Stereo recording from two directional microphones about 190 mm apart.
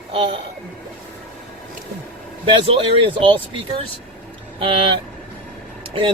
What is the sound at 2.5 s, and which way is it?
A man's voice, 30° right (ahead or behind).